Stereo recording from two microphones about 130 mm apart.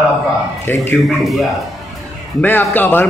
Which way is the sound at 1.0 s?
Centre (ahead or behind).